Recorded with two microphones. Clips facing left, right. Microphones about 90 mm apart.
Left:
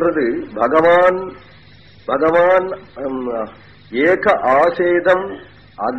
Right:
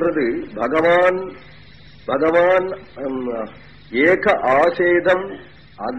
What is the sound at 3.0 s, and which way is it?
Speech, 45° left (ahead or behind).